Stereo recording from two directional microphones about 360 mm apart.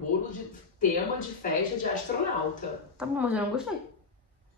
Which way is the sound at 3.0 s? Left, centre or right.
Centre.